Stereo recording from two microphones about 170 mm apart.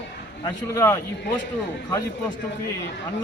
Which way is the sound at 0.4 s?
20° left (ahead or behind).